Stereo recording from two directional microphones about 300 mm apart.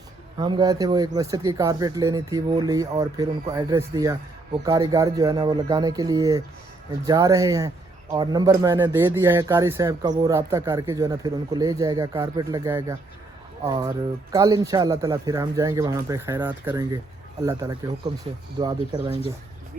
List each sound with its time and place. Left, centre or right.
0.3 s speech: centre